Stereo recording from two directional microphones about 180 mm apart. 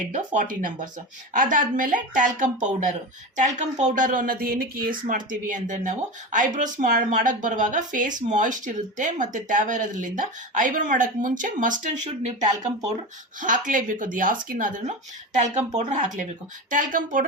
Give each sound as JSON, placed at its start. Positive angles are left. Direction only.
{"t": 0.3, "sound": "speech", "side_deg": -45}
{"t": 13.4, "sound": "speech", "side_deg": -45}